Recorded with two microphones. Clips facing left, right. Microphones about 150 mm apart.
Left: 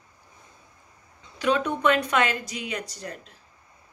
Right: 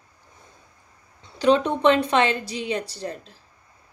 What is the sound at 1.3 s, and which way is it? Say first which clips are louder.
Speech: right 5 dB; 30° right (ahead or behind).